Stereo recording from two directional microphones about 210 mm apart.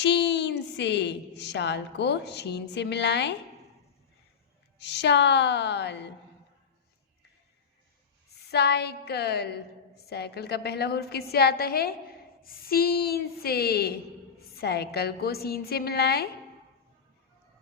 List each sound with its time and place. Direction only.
0.0 s a woman's voice: 55° left (ahead or behind)
4.8 s a woman's voice: 55° left (ahead or behind)
8.4 s a woman's voice: 55° left (ahead or behind)